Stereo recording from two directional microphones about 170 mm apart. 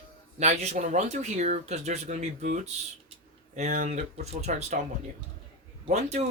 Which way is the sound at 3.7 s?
50° right (ahead or behind).